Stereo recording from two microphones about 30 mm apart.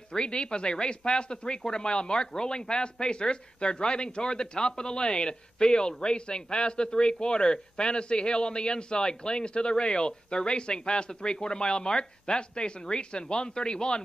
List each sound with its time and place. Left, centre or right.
0.1 s speech: left